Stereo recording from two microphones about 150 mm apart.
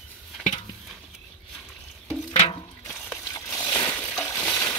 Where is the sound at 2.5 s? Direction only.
30° left (ahead or behind).